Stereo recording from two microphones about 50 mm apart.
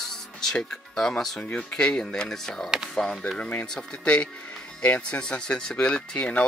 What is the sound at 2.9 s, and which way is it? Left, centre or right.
Speech, centre.